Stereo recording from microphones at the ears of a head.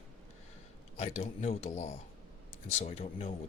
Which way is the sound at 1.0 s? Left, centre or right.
Left.